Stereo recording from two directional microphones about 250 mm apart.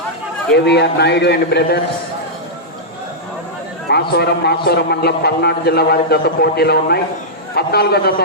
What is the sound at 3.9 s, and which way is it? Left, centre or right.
A man's voice, left.